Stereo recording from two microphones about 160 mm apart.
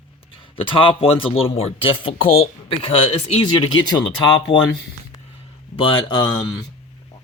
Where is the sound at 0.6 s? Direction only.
35° left (ahead or behind).